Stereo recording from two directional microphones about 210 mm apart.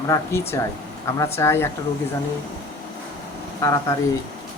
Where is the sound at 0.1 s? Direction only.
15° left (ahead or behind).